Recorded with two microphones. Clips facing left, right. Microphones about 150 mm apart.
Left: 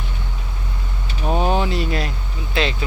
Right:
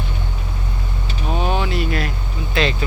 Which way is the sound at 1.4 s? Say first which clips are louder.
Left 1 dB; 35° left (ahead or behind).